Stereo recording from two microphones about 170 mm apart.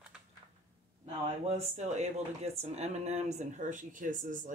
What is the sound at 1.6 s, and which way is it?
Speech, 40° right (ahead or behind).